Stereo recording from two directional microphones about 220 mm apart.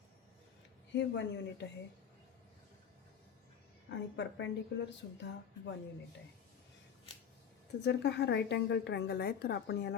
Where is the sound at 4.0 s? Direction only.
55° left (ahead or behind).